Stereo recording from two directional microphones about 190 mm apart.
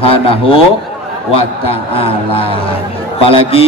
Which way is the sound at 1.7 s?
30° left (ahead or behind).